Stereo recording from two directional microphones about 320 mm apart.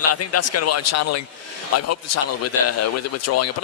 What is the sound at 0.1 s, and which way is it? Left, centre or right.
Speech, left.